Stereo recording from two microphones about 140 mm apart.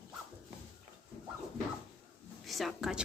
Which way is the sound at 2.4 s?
Centre (ahead or behind).